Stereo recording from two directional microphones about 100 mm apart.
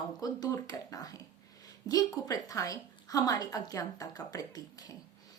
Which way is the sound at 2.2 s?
35° left (ahead or behind).